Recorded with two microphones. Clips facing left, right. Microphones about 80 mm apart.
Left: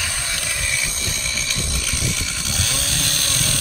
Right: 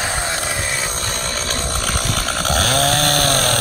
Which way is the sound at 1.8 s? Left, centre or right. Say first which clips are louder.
Right 6 dB; right.